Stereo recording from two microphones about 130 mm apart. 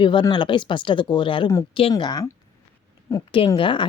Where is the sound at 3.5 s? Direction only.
40° left (ahead or behind).